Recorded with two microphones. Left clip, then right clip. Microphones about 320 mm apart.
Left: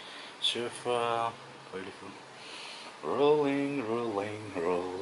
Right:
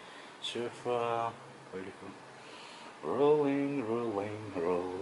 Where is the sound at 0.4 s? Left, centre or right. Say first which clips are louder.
Left 7 dB; centre.